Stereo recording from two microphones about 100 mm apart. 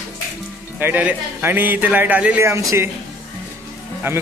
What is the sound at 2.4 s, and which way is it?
Speech, 30° right (ahead or behind).